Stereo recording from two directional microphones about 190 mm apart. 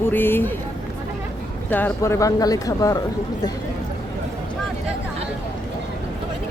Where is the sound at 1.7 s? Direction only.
10° left (ahead or behind).